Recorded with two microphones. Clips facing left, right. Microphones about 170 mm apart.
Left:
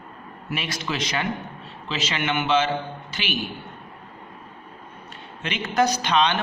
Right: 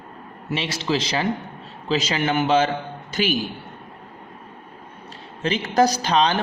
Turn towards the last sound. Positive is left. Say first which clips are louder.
# right 2 dB
turn(degrees=-35)  # may be behind; listen again after turning